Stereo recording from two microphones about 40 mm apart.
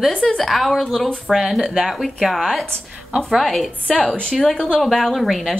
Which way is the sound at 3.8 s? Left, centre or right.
Left.